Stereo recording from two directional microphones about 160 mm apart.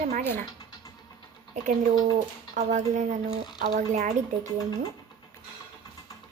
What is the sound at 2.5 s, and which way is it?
Speech, 50° right (ahead or behind).